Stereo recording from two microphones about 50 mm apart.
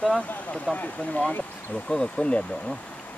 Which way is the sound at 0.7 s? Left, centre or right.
Left.